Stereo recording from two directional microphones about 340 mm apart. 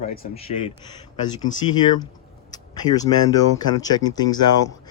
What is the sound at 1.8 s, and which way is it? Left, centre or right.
Speech, centre.